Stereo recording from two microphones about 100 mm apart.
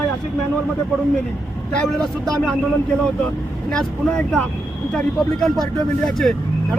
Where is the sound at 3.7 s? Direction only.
5° left (ahead or behind).